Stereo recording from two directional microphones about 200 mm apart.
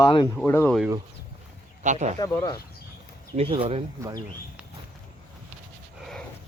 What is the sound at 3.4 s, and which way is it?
Speech, 25° right (ahead or behind).